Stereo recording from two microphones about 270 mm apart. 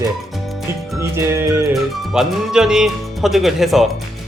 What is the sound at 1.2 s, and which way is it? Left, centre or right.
Music, centre.